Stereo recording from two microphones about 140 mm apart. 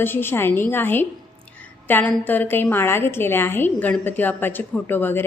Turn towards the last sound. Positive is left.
turn(degrees=15)  # may be behind; listen again after turning